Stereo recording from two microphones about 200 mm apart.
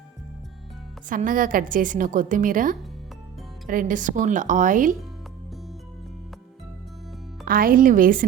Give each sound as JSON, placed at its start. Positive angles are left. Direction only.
{"t": 1.1, "sound": "a woman's voice", "side_deg": -40}
{"t": 7.4, "sound": "a woman's voice", "side_deg": -45}